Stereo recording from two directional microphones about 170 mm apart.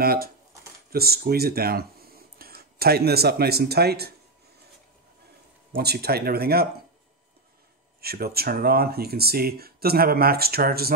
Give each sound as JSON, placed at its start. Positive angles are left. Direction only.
{"t": 0.0, "sound": "speech", "side_deg": -60}
{"t": 5.8, "sound": "speech", "side_deg": -70}
{"t": 8.0, "sound": "speech", "side_deg": -65}